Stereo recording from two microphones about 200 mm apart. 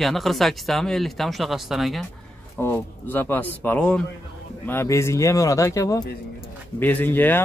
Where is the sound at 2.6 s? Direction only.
10° left (ahead or behind).